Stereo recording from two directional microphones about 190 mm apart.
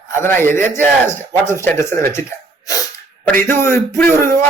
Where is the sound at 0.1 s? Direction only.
10° left (ahead or behind).